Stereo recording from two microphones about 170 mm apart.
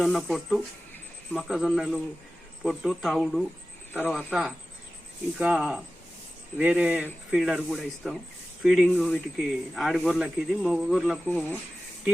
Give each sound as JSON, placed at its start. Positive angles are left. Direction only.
{"t": 0.0, "sound": "speech", "side_deg": 0}
{"t": 11.3, "sound": "speech", "side_deg": 10}